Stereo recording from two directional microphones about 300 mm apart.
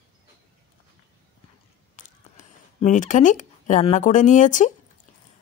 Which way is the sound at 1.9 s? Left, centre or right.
Left.